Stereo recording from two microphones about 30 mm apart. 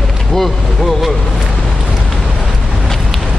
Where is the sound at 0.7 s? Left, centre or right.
Centre.